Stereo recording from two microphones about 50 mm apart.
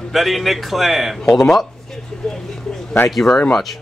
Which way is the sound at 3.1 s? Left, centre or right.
Centre.